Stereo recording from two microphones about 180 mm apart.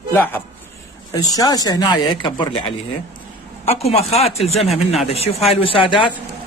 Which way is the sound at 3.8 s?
35° left (ahead or behind).